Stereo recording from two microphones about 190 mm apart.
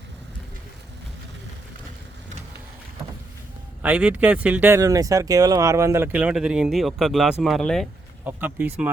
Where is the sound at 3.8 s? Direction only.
5° right (ahead or behind).